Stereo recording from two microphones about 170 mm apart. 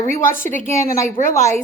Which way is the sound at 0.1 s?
50° left (ahead or behind).